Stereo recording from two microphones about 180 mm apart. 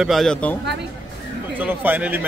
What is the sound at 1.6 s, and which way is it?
Speech, 10° right (ahead or behind).